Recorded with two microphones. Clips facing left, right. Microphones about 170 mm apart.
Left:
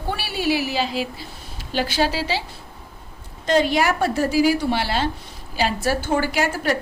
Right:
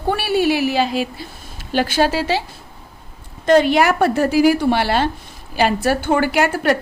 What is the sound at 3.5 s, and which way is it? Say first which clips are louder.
A woman's voice: right 5 dB; 60° right (ahead or behind).